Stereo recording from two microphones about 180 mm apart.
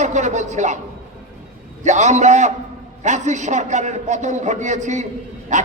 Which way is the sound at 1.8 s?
40° right (ahead or behind).